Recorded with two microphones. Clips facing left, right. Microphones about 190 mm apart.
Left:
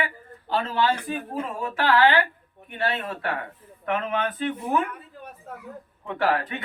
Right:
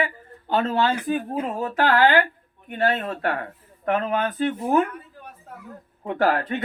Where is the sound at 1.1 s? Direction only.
40° right (ahead or behind).